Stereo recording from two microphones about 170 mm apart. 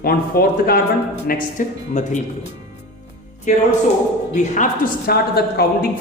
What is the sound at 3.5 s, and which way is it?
Speech, 45° left (ahead or behind).